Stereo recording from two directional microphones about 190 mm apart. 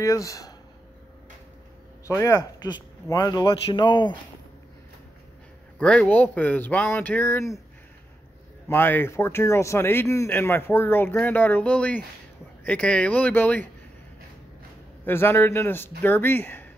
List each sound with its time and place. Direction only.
0.0 s speech: 15° left (ahead or behind)
2.0 s speech: 15° left (ahead or behind)
5.8 s speech: 5° left (ahead or behind)
8.6 s speech: 10° left (ahead or behind)
15.0 s speech: 10° left (ahead or behind)